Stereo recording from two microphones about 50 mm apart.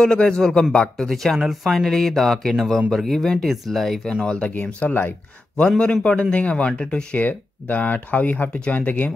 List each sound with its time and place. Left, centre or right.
0.0 s a man's voice: centre
4.1 s speech: left
7.2 s speech: left